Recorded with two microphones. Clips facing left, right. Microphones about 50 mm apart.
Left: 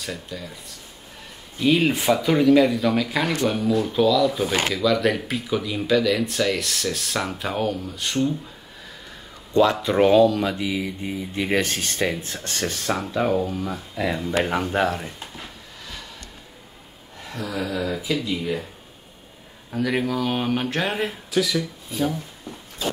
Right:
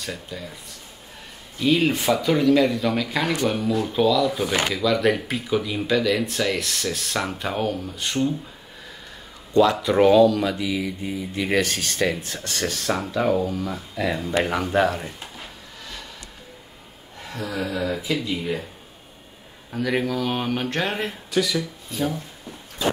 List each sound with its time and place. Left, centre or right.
0.0 s speech: centre
1.6 s speech: centre
9.6 s speech: left
9.9 s speech: centre
12.2 s speech: left
13.2 s speech: centre
15.0 s a sound: centre
17.3 s speech: centre
19.7 s speech: centre